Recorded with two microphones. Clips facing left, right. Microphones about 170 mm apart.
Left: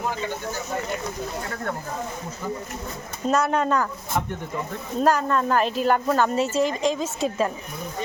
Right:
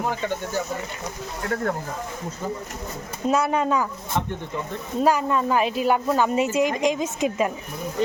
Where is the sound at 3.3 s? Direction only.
5° right (ahead or behind).